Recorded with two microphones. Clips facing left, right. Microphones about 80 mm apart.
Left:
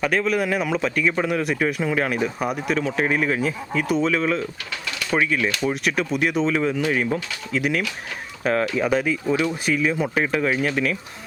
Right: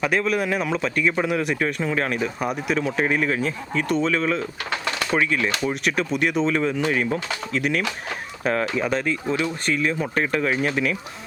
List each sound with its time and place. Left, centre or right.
0.0 s speech: centre
4.7 s bird: right
5.1 s speech: centre